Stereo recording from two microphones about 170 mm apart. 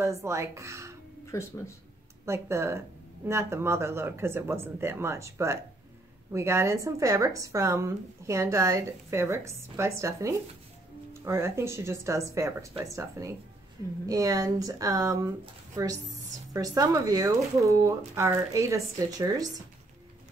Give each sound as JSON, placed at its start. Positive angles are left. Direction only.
{"t": 0.0, "sound": "a woman's voice", "side_deg": -15}
{"t": 1.2, "sound": "speech", "side_deg": 15}
{"t": 2.2, "sound": "a woman's voice", "side_deg": -15}